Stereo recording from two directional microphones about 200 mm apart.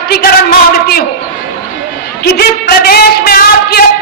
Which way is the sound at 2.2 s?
50° left (ahead or behind).